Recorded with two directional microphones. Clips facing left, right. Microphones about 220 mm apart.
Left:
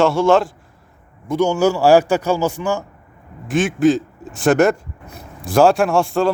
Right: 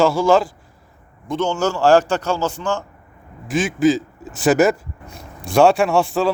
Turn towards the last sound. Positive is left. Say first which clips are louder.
# left 1 dB
turn(degrees=0)  # may be behind; listen again after turning